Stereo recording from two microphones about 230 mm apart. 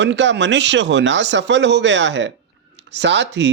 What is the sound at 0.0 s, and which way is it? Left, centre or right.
Speech, right.